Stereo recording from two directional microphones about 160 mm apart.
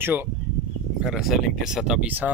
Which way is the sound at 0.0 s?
15° right (ahead or behind).